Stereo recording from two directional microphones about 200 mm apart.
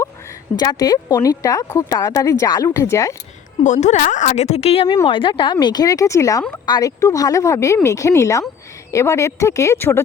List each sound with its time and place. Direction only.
0.5 s speech: 20° left (ahead or behind)
3.6 s speech: 35° left (ahead or behind); by 10.0 s 10° left (ahead or behind)